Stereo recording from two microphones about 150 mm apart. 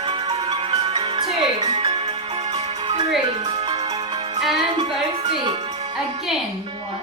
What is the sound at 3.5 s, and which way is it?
Music, 45° right (ahead or behind).